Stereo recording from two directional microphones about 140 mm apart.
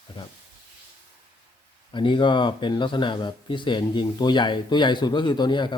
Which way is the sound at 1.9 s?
35° left (ahead or behind).